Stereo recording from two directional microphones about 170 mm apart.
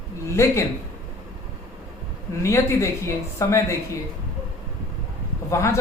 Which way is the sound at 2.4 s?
15° left (ahead or behind).